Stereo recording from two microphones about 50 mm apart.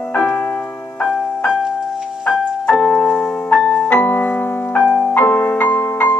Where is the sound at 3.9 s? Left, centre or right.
Left.